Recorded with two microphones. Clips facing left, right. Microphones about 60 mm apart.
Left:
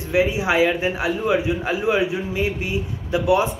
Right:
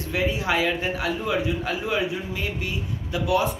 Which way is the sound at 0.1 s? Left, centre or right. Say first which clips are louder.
Left 5 dB; centre.